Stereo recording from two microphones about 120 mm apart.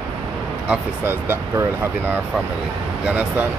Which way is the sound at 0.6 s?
20° right (ahead or behind).